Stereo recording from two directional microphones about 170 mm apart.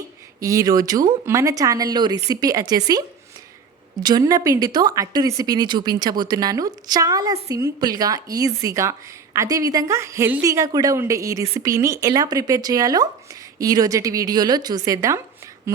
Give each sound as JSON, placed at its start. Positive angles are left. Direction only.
{"t": 0.3, "sound": "speech", "side_deg": -20}
{"t": 4.0, "sound": "speech", "side_deg": -25}